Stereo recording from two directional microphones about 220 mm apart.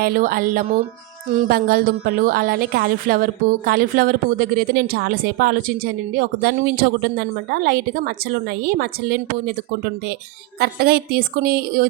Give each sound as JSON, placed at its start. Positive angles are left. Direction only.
{"t": 0.0, "sound": "a woman's voice", "side_deg": -40}
{"t": 10.6, "sound": "a woman's voice", "side_deg": -45}